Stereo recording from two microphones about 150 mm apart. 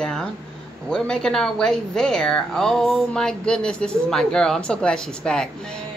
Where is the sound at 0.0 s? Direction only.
5° left (ahead or behind).